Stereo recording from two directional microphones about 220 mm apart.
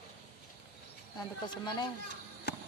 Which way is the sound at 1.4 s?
20° left (ahead or behind).